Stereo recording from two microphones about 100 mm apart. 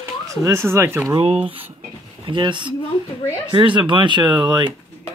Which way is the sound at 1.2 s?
70° right (ahead or behind).